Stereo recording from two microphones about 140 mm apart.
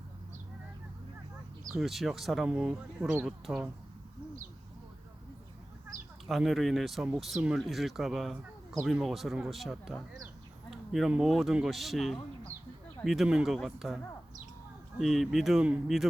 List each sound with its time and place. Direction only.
1.7 s speech: centre (ahead or behind)
5.9 s chicken: 65° right (ahead or behind)
6.2 s speech: centre (ahead or behind)